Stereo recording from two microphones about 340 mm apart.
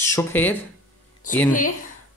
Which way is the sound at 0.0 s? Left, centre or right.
Centre.